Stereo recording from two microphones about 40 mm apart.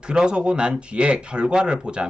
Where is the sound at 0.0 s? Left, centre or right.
Right.